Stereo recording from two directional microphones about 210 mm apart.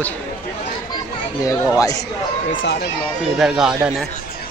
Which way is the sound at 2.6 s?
55° left (ahead or behind).